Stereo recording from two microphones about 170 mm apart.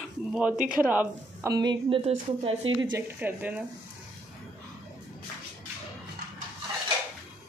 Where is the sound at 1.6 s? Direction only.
30° right (ahead or behind).